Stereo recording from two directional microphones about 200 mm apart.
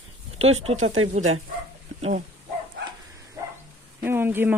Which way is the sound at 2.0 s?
30° right (ahead or behind).